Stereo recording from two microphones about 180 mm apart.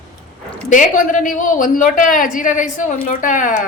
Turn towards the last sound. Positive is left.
turn(degrees=45)  # may be behind; listen again after turning